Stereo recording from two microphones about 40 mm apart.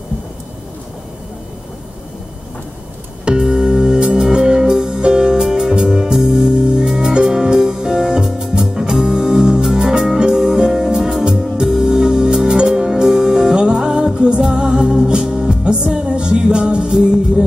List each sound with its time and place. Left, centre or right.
3.3 s music: right
14.2 s music: right